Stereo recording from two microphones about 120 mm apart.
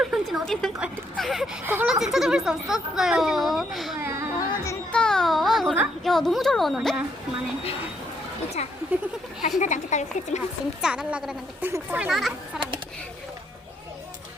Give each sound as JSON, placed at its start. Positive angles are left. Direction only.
{"t": 0.0, "sound": "a sound", "side_deg": 0}
{"t": 1.2, "sound": "speech", "side_deg": 0}
{"t": 1.6, "sound": "speech", "side_deg": -15}
{"t": 2.1, "sound": "speech", "side_deg": -5}
{"t": 4.0, "sound": "a sound", "side_deg": -25}
{"t": 4.4, "sound": "music", "side_deg": 25}
{"t": 4.9, "sound": "a sound", "side_deg": 5}
{"t": 6.1, "sound": "speech", "side_deg": 0}
{"t": 8.6, "sound": "speech", "side_deg": 65}
{"t": 9.6, "sound": "a woman's voice", "side_deg": 90}
{"t": 10.8, "sound": "speech", "side_deg": -5}